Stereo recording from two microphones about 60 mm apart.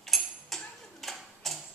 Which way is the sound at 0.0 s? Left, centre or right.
Centre.